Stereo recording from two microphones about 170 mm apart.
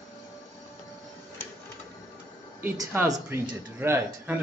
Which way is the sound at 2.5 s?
10° right (ahead or behind).